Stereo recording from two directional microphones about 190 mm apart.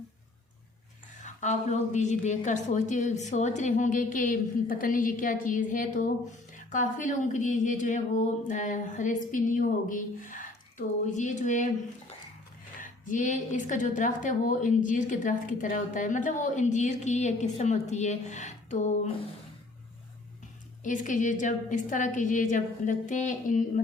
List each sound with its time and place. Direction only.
1.2 s a woman's voice: 40° left (ahead or behind)
12.8 s a woman's voice: 40° left (ahead or behind)
20.8 s a woman's voice: 40° left (ahead or behind)